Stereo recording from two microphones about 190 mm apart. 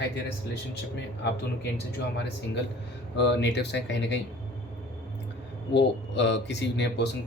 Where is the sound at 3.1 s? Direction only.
65° left (ahead or behind).